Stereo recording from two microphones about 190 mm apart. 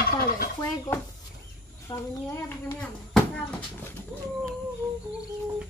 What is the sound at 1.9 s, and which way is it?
Speech, 15° left (ahead or behind).